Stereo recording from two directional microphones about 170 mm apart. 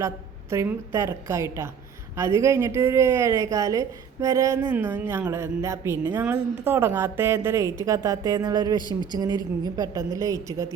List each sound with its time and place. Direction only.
0.5 s a woman's voice: 15° right (ahead or behind)